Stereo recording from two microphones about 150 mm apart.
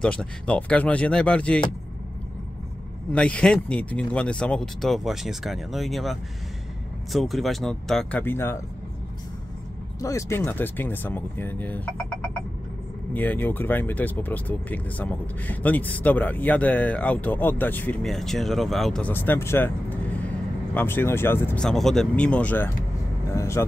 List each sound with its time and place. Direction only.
0.0 s speech: 5° left (ahead or behind)
3.1 s speech: 5° left (ahead or behind)
9.9 s speech: 20° left (ahead or behind)
13.1 s speech: 10° left (ahead or behind)
21.6 s speech: centre (ahead or behind); by 23.6 s 20° left (ahead or behind)